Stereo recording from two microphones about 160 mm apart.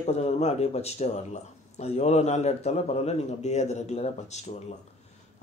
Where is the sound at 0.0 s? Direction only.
45° left (ahead or behind).